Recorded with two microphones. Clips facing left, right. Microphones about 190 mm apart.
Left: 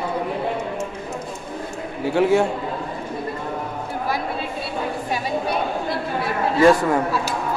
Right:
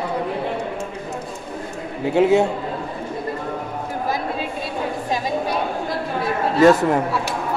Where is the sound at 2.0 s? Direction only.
20° right (ahead or behind).